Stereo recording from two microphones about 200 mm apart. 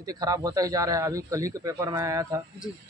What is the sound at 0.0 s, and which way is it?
Speech, 20° right (ahead or behind).